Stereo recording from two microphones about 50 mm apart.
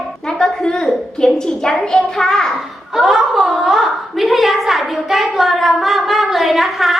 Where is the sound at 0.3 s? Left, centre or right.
Centre.